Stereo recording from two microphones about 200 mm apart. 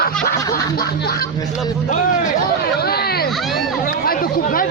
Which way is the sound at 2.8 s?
50° left (ahead or behind).